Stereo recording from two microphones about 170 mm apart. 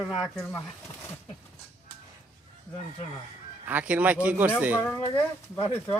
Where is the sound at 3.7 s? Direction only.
10° right (ahead or behind).